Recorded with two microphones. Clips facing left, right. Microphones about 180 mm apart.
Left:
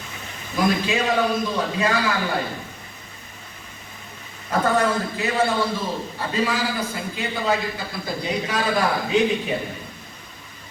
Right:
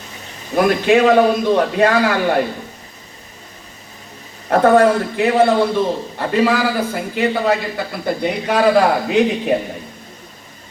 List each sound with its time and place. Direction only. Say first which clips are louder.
0.5 s a man's voice: right 8 dB; 65° right (ahead or behind)
4.4 s a man's voice: right 9 dB; 65° right (ahead or behind)